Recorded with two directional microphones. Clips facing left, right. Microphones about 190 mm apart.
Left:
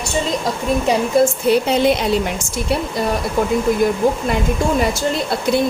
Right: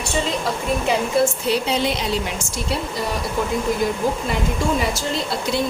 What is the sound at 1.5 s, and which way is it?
Speech, 50° left (ahead or behind).